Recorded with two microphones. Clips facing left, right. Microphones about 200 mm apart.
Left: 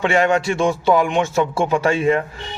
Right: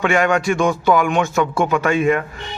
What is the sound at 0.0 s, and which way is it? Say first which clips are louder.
A man's voice: even; 30° left (ahead or behind).